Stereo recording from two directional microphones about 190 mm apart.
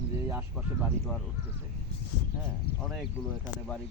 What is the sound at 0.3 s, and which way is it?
Speech, 10° right (ahead or behind).